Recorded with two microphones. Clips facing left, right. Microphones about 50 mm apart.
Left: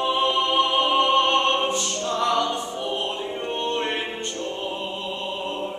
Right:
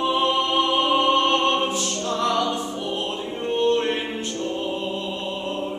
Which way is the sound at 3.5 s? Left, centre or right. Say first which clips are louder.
Right 7 dB; centre.